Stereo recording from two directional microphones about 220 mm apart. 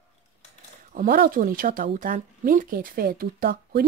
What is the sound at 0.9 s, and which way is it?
Speech, 40° right (ahead or behind).